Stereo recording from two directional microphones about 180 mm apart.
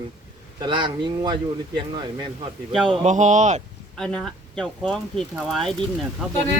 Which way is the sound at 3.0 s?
40° right (ahead or behind).